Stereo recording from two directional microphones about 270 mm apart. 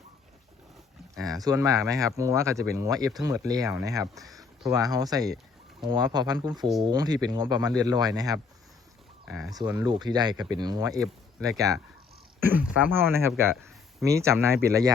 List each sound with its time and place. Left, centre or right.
1.2 s speech: centre
4.2 s a sound: centre
4.7 s speech: centre
9.2 s speech: centre
9.6 s speech: centre